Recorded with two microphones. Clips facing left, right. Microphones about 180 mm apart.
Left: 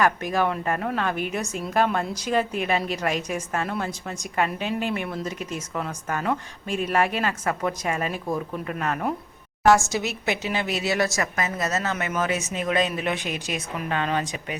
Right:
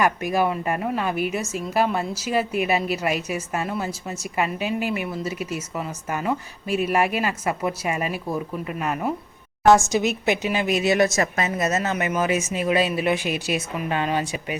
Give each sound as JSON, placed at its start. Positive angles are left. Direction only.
{"t": 0.0, "sound": "a woman's voice", "side_deg": -10}
{"t": 9.6, "sound": "a woman's voice", "side_deg": -20}